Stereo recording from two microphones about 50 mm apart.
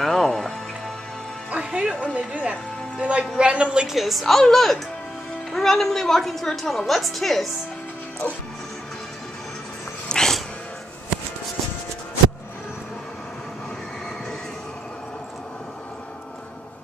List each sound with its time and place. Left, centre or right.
0.0 s music: centre
1.5 s music: right
2.1 s a man's voice: right
3.8 s a woman's voice: centre
10.0 s cat: centre